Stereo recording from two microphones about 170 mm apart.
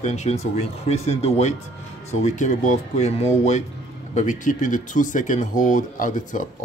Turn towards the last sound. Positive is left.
turn(degrees=50)  # may be behind; listen again after turning